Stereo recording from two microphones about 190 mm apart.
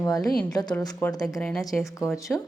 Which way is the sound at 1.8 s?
15° left (ahead or behind).